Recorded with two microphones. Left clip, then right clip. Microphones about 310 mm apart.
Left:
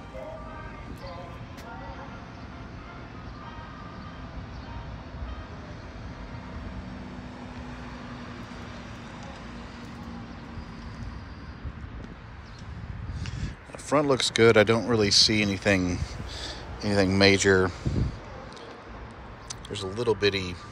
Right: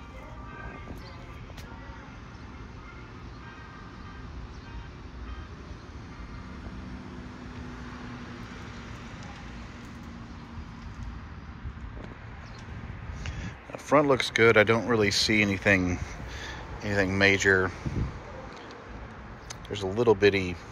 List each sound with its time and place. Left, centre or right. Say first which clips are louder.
13.2 s speech: even; centre
19.7 s speech: right 3 dB; centre